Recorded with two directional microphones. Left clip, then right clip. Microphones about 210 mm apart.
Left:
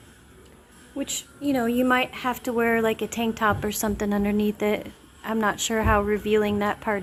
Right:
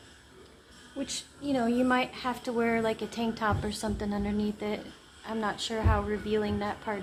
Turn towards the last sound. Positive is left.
turn(degrees=30)  # may be behind; listen again after turning